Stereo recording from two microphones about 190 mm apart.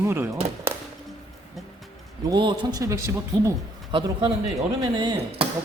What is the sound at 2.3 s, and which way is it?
Speech, 25° right (ahead or behind).